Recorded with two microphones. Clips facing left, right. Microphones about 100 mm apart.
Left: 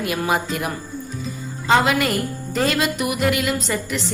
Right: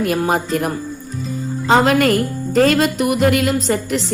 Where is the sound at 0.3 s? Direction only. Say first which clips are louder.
Right 4 dB; 40° right (ahead or behind).